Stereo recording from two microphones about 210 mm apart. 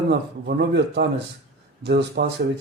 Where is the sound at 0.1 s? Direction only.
55° right (ahead or behind).